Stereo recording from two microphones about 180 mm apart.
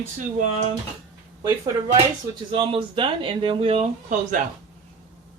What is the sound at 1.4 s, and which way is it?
Speech, 20° right (ahead or behind).